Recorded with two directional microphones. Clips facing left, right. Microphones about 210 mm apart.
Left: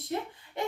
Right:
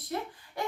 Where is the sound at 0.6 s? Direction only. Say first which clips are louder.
Left 1 dB; 25° left (ahead or behind).